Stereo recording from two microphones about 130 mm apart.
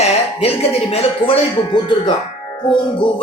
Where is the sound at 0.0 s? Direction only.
50° left (ahead or behind).